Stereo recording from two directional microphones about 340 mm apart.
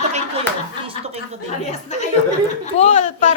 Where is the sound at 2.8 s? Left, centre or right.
Left.